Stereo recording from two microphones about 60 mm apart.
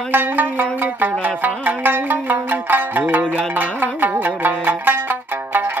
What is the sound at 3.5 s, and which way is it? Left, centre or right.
Zither, right.